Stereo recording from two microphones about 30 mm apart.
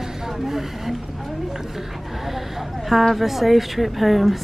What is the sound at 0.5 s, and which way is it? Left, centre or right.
Speech, centre.